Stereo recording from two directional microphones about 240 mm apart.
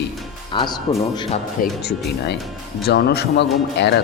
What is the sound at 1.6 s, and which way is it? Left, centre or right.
Speech, left.